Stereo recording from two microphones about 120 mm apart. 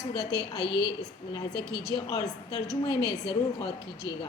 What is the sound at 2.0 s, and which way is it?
Speech, 30° left (ahead or behind).